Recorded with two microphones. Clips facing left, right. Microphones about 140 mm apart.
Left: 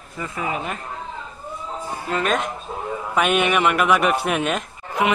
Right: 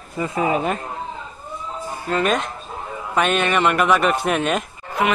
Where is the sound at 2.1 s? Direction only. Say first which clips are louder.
Right 2 dB; centre (ahead or behind).